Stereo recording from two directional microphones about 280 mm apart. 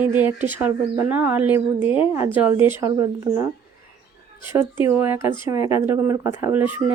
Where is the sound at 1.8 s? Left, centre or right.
Centre.